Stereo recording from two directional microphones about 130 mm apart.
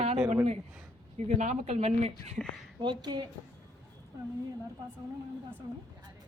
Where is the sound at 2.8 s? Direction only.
35° right (ahead or behind).